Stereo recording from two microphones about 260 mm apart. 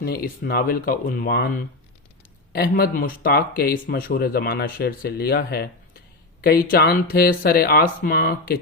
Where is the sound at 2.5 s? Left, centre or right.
Left.